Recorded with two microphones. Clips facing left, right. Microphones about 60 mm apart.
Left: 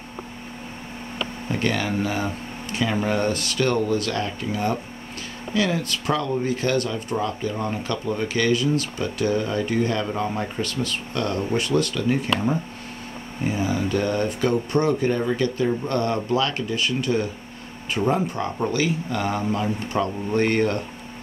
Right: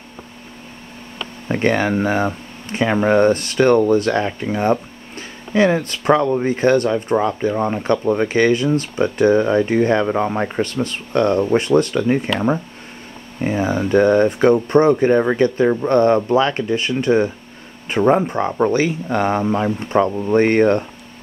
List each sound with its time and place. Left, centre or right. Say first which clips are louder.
1.5 s speech: right 8 dB; right